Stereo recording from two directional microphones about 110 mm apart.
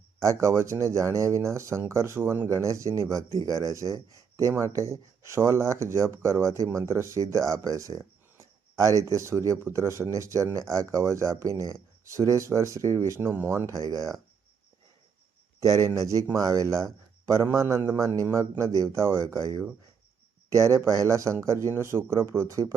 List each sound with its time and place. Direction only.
0.2 s speech: 30° right (ahead or behind)
15.6 s speech: 35° right (ahead or behind)